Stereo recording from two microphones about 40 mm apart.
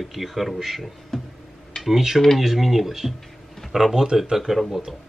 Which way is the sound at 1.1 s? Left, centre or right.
Centre.